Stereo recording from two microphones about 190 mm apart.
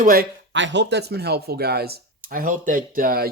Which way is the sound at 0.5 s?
70° right (ahead or behind).